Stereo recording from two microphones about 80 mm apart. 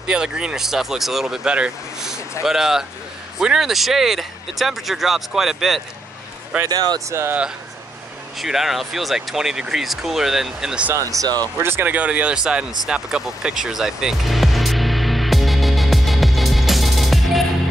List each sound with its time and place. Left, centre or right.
0.0 s speech: centre
6.7 s speech: right
7.1 s speech: right
8.4 s speech: centre
11.0 s speech: right
11.6 s speech: right
12.8 s music: centre